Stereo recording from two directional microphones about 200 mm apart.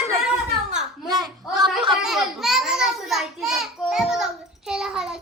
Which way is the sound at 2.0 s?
Centre (ahead or behind).